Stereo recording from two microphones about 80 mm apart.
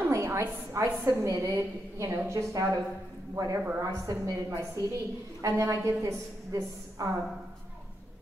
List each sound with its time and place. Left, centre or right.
0.1 s a woman's voice: right
3.3 s a woman's voice: right